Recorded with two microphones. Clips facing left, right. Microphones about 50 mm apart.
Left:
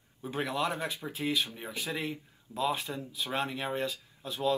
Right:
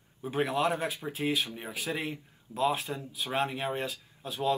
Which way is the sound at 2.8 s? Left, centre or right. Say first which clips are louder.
Right 1 dB; right.